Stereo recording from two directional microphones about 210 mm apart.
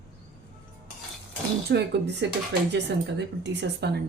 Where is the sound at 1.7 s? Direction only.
55° right (ahead or behind).